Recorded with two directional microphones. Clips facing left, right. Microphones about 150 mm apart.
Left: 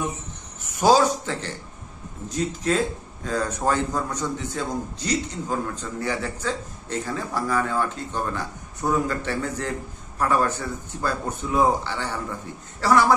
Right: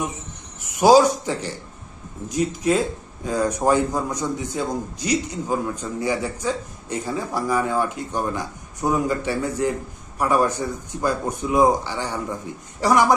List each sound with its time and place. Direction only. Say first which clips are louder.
0.7 s a man's voice: right 4 dB; 15° right (ahead or behind)